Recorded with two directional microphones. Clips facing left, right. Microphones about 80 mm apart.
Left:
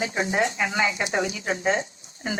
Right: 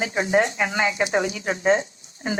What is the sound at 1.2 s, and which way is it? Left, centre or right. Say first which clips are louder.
Speech: right 2 dB; right.